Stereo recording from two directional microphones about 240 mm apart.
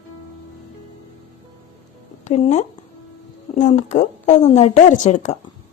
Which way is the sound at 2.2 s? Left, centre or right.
Left.